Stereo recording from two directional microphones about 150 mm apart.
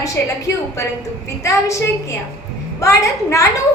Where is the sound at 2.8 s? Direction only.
20° left (ahead or behind).